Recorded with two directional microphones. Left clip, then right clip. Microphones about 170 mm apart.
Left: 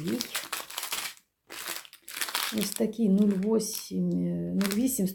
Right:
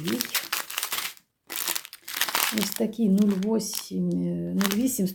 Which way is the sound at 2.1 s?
20° right (ahead or behind).